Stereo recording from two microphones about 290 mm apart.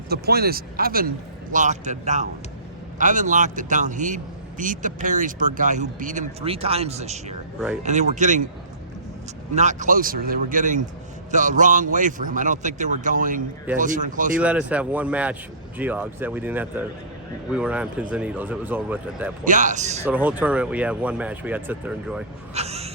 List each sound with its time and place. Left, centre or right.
0.1 s a man's voice: right
9.6 s a man's voice: right
14.3 s speech: centre
19.5 s a man's voice: right
20.1 s speech: centre
22.5 s a sound: right